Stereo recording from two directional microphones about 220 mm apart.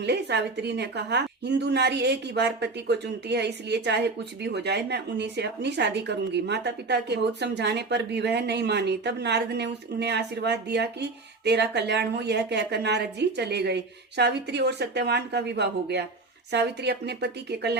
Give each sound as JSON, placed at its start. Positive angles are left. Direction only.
{"t": 0.0, "sound": "a woman's voice", "side_deg": -50}